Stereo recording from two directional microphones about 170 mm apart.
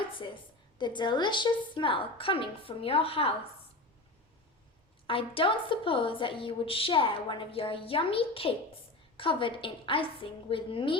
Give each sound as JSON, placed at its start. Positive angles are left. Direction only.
{"t": 0.8, "sound": "a woman's voice", "side_deg": 25}
{"t": 5.0, "sound": "a woman's voice", "side_deg": 30}